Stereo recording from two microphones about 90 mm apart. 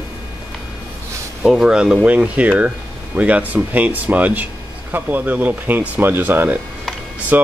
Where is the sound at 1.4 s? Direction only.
5° right (ahead or behind).